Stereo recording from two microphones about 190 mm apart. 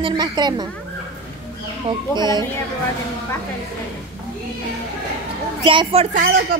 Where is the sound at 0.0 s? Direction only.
20° right (ahead or behind).